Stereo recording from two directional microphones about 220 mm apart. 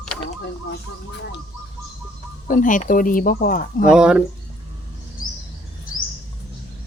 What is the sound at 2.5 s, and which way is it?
Speech, 35° left (ahead or behind).